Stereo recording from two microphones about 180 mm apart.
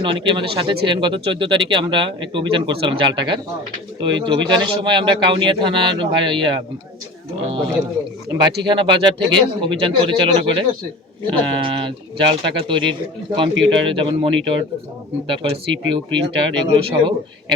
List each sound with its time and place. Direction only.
0.0 s speech: 25° right (ahead or behind)
8.6 s speech: 25° right (ahead or behind)